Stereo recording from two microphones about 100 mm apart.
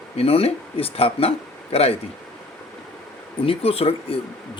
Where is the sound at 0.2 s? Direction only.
80° left.